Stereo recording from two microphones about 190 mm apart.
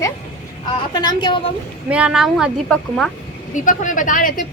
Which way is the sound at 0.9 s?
25° left (ahead or behind).